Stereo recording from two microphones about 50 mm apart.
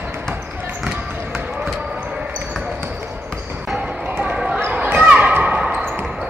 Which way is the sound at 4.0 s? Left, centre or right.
Right.